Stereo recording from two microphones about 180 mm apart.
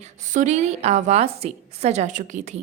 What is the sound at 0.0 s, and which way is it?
A woman's voice, 40° right (ahead or behind).